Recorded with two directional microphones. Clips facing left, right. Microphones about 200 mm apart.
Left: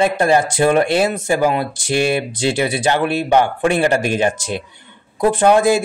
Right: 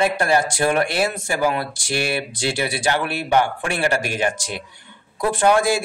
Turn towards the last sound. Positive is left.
turn(degrees=20)  # may be behind; listen again after turning